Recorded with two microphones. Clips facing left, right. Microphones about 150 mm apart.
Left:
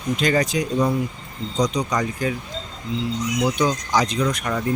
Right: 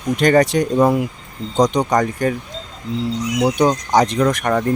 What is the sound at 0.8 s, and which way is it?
Speech, 55° right (ahead or behind).